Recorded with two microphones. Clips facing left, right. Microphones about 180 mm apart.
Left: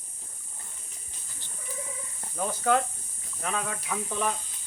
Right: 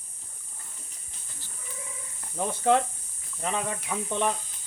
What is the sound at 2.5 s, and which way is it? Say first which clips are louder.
Speech: right 2 dB; 25° right (ahead or behind).